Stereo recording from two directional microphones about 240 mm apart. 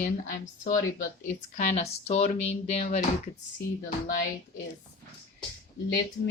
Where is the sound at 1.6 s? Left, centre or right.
Left.